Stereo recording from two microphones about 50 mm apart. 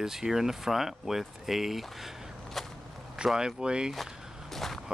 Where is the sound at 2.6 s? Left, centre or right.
Centre.